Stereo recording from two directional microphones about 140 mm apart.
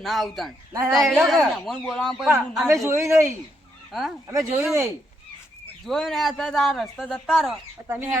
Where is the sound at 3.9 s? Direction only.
Centre (ahead or behind).